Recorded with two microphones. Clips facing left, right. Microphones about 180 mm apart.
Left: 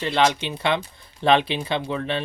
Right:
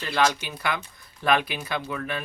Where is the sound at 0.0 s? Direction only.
25° left (ahead or behind).